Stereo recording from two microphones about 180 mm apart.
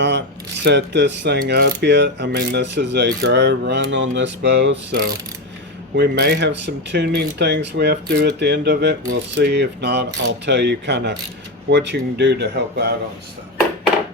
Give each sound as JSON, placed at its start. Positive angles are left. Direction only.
{"t": 0.0, "sound": "speech", "side_deg": -80}
{"t": 6.0, "sound": "speech", "side_deg": -65}